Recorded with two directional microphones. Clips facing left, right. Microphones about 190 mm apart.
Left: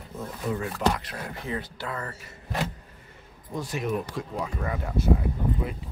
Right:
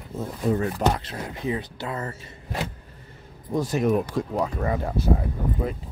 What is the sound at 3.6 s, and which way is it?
Speech, 40° right (ahead or behind).